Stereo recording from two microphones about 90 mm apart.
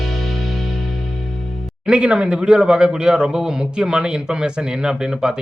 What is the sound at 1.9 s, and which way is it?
Speech, 10° right (ahead or behind).